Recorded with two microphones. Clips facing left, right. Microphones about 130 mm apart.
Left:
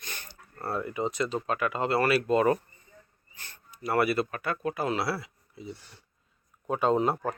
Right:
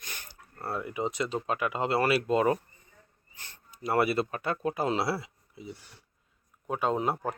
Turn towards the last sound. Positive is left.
turn(degrees=-10)  # may be behind; listen again after turning